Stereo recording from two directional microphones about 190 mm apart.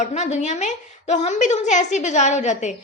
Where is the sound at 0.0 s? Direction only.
35° left (ahead or behind).